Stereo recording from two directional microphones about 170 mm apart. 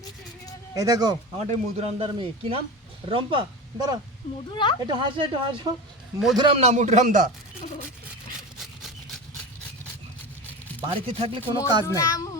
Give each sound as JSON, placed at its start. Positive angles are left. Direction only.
{"t": 0.7, "sound": "speech", "side_deg": -20}
{"t": 1.4, "sound": "a man's voice", "side_deg": -40}
{"t": 4.5, "sound": "a child's voice", "side_deg": 25}
{"t": 4.8, "sound": "speech", "side_deg": -25}
{"t": 6.6, "sound": "a man's voice", "side_deg": -40}
{"t": 8.5, "sound": "rub", "side_deg": 0}
{"t": 10.8, "sound": "a man's voice", "side_deg": -35}
{"t": 11.9, "sound": "a child's voice", "side_deg": 20}